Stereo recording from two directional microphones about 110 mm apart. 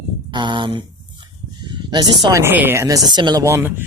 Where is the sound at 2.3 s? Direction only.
20° right (ahead or behind); by 3.4 s 40° right (ahead or behind).